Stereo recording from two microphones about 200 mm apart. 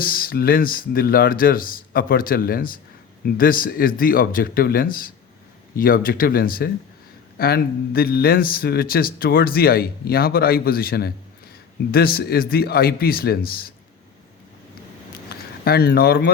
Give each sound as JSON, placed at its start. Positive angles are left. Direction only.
{"t": 0.0, "sound": "a man's voice", "side_deg": 45}
{"t": 15.6, "sound": "a man's voice", "side_deg": 50}